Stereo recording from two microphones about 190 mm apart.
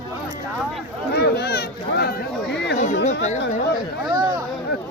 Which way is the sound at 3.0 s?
40° left (ahead or behind).